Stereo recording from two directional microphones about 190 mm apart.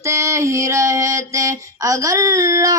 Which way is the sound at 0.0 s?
15° right (ahead or behind).